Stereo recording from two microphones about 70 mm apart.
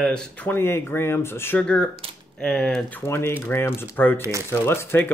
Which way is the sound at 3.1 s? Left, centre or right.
Left.